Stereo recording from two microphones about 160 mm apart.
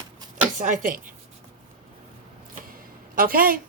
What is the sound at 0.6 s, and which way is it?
Speech, 55° right (ahead or behind).